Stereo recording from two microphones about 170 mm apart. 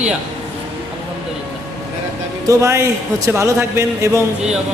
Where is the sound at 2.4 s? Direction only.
20° right (ahead or behind).